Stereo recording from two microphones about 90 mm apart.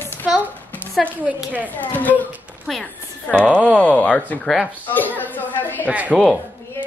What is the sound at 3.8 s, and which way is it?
Speech, 15° left (ahead or behind).